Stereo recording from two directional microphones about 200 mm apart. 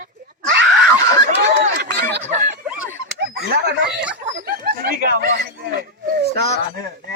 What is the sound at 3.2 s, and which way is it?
Speech, 55° right (ahead or behind).